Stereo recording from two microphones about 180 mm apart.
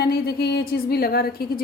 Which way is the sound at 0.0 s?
60° left (ahead or behind).